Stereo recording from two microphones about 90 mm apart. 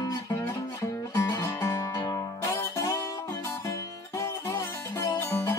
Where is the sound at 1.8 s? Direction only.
40° left (ahead or behind).